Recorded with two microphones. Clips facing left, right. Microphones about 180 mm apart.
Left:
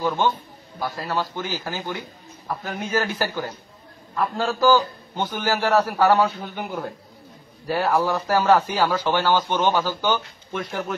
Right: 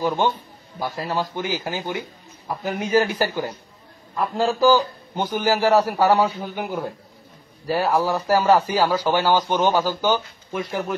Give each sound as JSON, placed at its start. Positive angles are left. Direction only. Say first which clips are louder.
{"t": 0.0, "sound": "a man's voice", "louder": "right 1 dB", "side_deg": -10}